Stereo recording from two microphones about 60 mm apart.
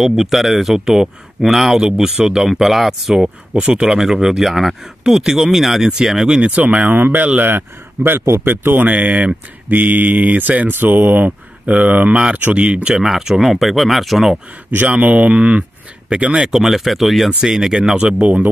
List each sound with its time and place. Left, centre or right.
0.0 s speech: centre
6.5 s speech: right
8.8 s speech: right
13.0 s speech: centre
14.7 s speech: right
16.5 s speech: centre; by 18.5 s right